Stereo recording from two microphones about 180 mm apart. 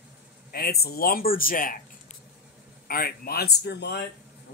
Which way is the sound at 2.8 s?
55° left (ahead or behind).